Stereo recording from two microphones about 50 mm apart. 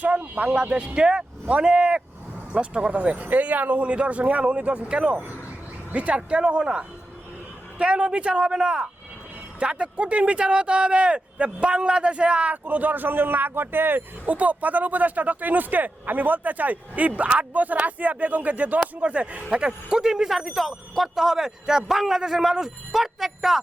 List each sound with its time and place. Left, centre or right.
0.0 s speech: right
12.6 s a man's voice: right
14.3 s speech: right
20.0 s speech: centre